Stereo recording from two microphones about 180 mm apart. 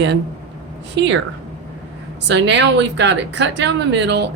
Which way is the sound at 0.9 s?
90° right.